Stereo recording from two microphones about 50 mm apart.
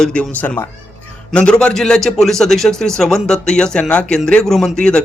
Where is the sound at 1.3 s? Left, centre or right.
Centre.